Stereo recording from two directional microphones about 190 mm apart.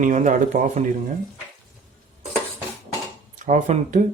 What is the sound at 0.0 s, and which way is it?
Speech, 40° right (ahead or behind).